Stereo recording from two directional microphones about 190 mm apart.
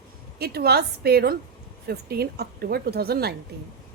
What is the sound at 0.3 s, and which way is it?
A woman's voice, 55° right (ahead or behind).